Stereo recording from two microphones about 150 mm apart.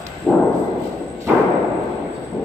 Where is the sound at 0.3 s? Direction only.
10° right (ahead or behind).